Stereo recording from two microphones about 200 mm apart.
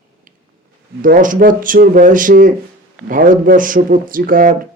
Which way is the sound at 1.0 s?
40° right (ahead or behind).